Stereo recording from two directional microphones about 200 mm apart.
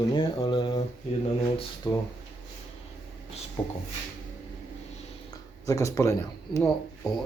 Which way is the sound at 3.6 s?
25° left (ahead or behind).